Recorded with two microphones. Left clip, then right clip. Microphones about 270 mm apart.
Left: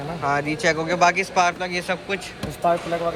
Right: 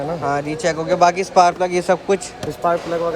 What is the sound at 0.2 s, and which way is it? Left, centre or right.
A man's voice, centre.